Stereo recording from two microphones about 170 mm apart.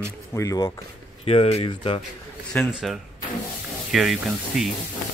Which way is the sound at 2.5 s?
Centre (ahead or behind).